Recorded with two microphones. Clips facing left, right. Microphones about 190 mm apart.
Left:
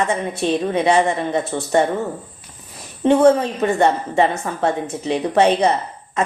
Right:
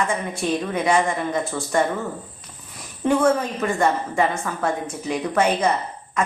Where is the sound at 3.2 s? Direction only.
25° left (ahead or behind).